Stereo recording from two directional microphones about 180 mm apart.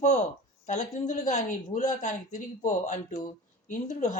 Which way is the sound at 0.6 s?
40° left (ahead or behind).